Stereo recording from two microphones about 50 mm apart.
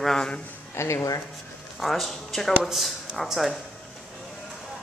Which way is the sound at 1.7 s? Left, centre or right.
Centre.